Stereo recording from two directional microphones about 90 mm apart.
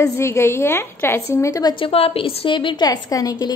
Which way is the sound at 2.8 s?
45° left (ahead or behind).